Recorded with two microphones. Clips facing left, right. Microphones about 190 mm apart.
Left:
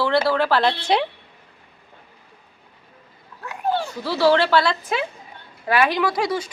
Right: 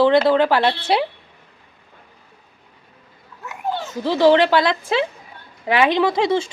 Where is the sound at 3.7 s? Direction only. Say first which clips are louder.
Right 2 dB; 20° right (ahead or behind).